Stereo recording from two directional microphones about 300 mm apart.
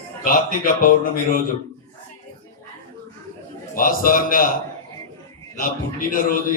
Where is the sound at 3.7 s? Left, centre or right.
Left.